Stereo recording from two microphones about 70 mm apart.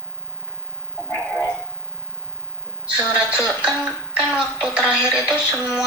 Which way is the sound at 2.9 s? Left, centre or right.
Right.